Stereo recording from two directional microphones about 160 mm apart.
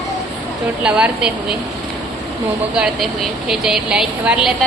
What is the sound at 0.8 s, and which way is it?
Speech, 5° right (ahead or behind).